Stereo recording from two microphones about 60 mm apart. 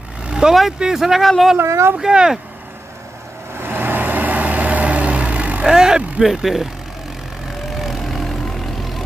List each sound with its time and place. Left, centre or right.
0.2 s vehicle: centre
0.7 s speech: centre
1.6 s speech: right
2.0 s speech: centre
3.5 s vehicle: right
5.6 s speech: centre
7.7 s vehicle: centre